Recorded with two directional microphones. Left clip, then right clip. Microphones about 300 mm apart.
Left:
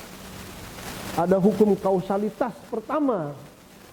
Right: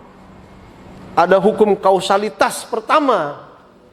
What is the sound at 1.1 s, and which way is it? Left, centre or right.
Speech, centre.